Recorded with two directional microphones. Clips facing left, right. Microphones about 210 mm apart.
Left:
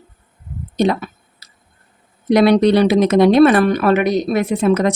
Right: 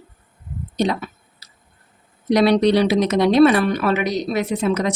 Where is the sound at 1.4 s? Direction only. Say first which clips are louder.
Left 1 dB; 55° left (ahead or behind).